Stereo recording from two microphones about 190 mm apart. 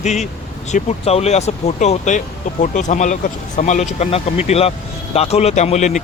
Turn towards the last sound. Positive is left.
turn(degrees=35)  # may be behind; listen again after turning